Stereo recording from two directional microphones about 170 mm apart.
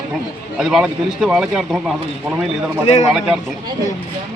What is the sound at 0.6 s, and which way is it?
Speech, 5° right (ahead or behind).